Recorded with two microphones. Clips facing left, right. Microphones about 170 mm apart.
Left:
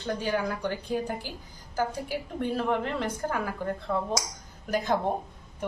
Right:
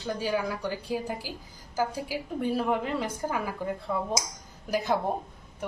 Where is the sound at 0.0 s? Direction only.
5° right (ahead or behind).